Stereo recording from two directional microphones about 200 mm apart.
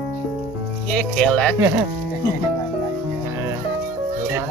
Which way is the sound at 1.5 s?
10° right (ahead or behind).